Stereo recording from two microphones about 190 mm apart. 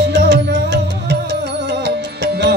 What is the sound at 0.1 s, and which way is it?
Music, 65° right (ahead or behind).